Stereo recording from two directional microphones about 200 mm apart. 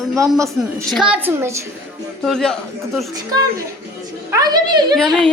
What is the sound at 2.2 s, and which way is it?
Speech, centre (ahead or behind).